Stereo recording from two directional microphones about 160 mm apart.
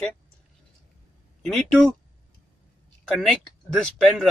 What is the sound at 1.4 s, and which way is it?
Speech, 5° left (ahead or behind).